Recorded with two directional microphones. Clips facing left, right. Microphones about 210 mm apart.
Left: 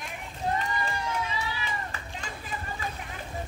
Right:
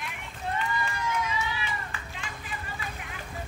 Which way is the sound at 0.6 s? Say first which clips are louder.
Even; 35° left (ahead or behind).